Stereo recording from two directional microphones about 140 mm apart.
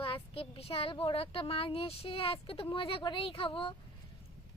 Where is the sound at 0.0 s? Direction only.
40° left (ahead or behind).